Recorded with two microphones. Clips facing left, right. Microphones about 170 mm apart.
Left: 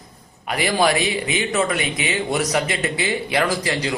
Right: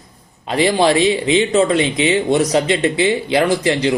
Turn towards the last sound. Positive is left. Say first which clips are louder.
# right 6 dB
turn(degrees=-25)  # may be behind; listen again after turning